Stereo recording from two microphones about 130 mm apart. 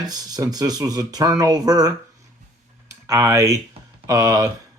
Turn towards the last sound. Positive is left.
turn(degrees=-25)  # may be behind; listen again after turning